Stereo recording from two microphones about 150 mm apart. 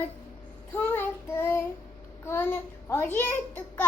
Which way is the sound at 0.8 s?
10° left (ahead or behind).